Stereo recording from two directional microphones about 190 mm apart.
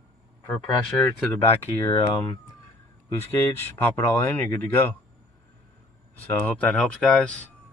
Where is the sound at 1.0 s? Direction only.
10° left (ahead or behind).